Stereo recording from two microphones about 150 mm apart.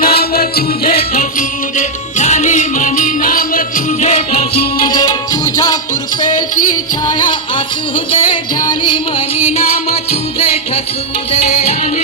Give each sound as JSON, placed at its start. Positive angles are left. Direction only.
{"t": 0.0, "sound": "music", "side_deg": 90}
{"t": 1.2, "sound": "music", "side_deg": 55}
{"t": 4.9, "sound": "music", "side_deg": 25}
{"t": 7.1, "sound": "music", "side_deg": 30}
{"t": 9.4, "sound": "music", "side_deg": 45}